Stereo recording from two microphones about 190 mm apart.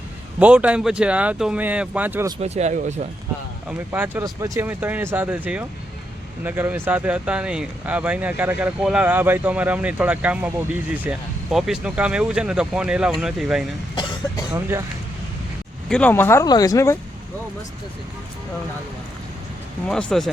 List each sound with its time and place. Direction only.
0.3 s speech: 5° right (ahead or behind)
2.4 s speech: 35° right (ahead or behind)
3.7 s speech: 10° right (ahead or behind)
11.5 s speech: 5° right (ahead or behind)
14.5 s speech: 15° right (ahead or behind)
15.9 s speech: 5° left (ahead or behind)
19.9 s speech: 5° left (ahead or behind)